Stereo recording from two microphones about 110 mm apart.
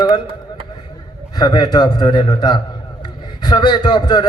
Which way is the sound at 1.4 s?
40° left (ahead or behind).